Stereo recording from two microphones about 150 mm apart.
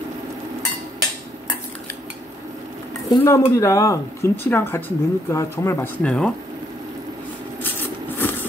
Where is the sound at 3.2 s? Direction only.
20° left (ahead or behind).